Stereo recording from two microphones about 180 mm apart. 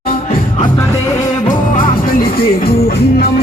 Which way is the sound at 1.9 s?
50° left (ahead or behind).